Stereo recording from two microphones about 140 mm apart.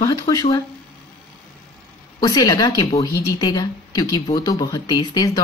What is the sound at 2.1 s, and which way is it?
Speech, 30° left (ahead or behind).